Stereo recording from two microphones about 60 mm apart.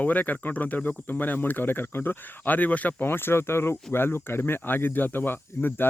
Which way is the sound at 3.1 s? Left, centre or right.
Left.